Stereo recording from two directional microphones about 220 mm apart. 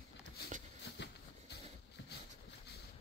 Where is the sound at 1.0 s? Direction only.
50° left (ahead or behind).